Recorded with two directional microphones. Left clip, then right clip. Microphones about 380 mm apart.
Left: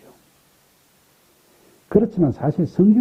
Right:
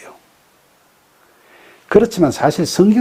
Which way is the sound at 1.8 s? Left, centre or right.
Centre.